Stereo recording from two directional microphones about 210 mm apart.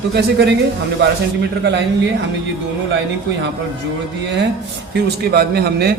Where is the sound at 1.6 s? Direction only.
55° right (ahead or behind).